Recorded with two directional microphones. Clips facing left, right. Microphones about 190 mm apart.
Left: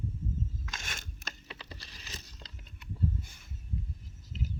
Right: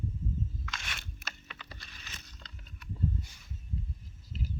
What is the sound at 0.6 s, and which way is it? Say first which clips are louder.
Biting: even; 45° left (ahead or behind).